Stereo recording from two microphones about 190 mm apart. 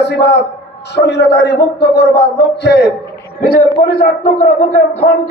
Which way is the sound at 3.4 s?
50° left (ahead or behind).